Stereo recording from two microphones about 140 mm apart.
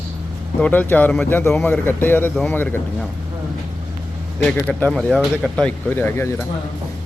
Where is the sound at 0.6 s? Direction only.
10° left (ahead or behind).